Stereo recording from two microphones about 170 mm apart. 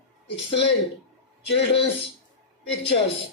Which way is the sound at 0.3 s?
90° left.